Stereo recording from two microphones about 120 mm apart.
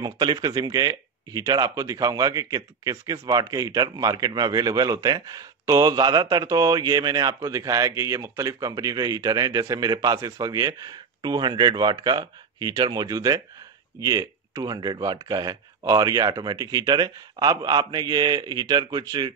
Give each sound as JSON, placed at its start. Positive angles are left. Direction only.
{"t": 0.0, "sound": "speech", "side_deg": -35}